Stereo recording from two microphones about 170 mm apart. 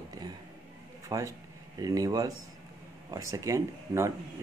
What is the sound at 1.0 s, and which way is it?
Speech, 20° right (ahead or behind).